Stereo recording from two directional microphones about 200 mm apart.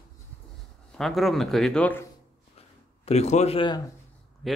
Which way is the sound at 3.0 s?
35° left (ahead or behind).